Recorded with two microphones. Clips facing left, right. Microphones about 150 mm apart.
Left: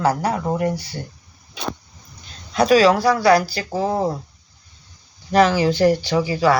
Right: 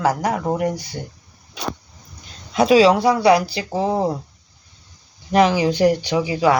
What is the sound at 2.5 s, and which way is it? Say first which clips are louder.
Speech: right 1 dB; 20° right (ahead or behind).